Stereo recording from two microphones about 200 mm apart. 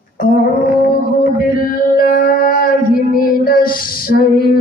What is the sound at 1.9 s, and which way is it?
Speech, 45° left (ahead or behind).